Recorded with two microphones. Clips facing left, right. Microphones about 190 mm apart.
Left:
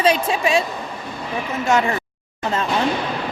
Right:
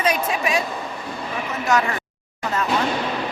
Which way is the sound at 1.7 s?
25° left (ahead or behind).